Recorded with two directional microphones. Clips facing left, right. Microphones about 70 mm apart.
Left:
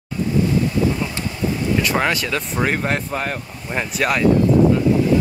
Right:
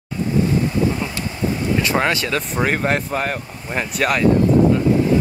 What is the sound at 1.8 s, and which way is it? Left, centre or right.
Speech, centre.